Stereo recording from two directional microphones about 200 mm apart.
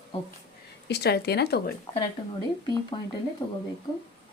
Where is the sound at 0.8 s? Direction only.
55° left (ahead or behind).